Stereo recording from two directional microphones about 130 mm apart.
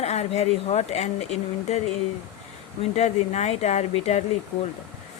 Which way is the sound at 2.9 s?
60° left (ahead or behind).